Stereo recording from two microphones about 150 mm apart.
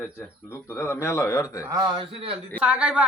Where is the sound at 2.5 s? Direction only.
10° right (ahead or behind).